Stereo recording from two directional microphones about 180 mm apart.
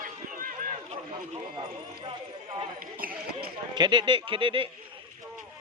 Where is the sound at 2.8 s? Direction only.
55° right (ahead or behind).